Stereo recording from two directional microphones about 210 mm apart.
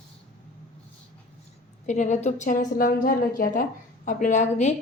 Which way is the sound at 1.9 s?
35° left (ahead or behind).